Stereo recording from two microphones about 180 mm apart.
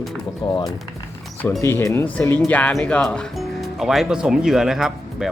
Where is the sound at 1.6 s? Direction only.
15° left (ahead or behind).